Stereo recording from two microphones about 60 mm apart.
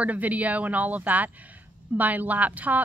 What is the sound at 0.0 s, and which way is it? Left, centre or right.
A woman's voice, right.